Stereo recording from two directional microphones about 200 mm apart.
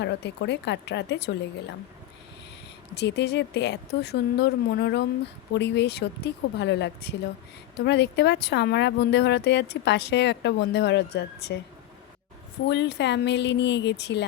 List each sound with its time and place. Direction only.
0.0 s speech: 60° left (ahead or behind)
2.9 s speech: 60° left (ahead or behind)
12.6 s speech: 60° left (ahead or behind)